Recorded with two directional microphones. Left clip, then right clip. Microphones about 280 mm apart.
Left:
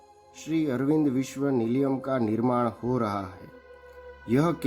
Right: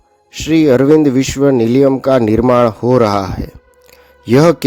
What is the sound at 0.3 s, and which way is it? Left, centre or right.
Speech, right.